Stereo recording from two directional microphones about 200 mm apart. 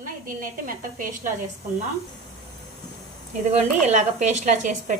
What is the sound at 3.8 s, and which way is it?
Speech, 35° right (ahead or behind).